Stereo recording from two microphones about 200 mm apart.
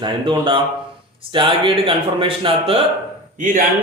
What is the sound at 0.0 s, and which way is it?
Speech, 25° right (ahead or behind).